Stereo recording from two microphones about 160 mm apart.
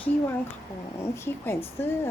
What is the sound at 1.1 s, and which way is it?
Speech, 15° left (ahead or behind).